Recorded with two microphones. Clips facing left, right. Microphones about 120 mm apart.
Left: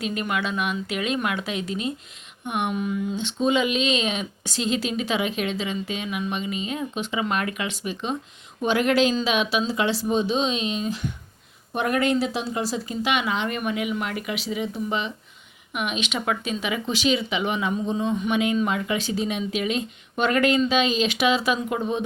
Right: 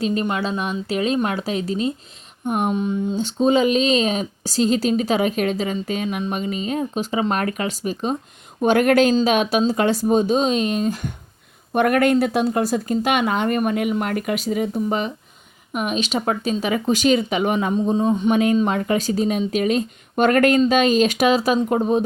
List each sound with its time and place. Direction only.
0.0 s speech: 35° right (ahead or behind)
8.6 s speech: 50° right (ahead or behind)